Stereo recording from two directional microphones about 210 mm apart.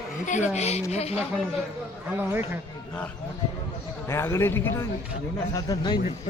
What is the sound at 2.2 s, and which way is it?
Speech, 10° right (ahead or behind).